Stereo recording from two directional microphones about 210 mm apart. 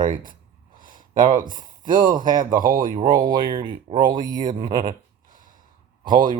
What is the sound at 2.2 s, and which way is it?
Speech, 40° right (ahead or behind).